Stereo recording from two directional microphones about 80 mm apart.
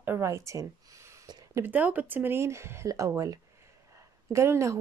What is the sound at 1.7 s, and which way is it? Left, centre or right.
Speech, centre.